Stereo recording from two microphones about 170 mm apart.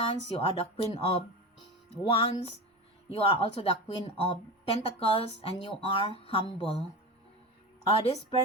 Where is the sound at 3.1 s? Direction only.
35° left (ahead or behind).